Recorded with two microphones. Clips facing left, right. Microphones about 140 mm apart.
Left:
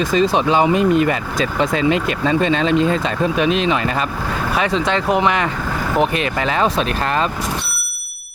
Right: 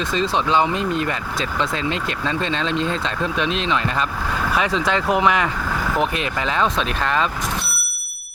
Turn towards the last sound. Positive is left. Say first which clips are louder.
# left 2 dB
turn(degrees=40)  # may be behind; listen again after turning